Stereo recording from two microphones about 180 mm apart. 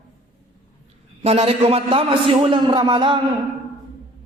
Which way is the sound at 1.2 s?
35° right (ahead or behind).